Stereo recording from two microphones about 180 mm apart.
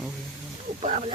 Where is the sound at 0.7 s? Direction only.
35° right (ahead or behind).